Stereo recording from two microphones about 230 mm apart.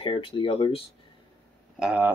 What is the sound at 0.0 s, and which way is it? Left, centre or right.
Speech, left.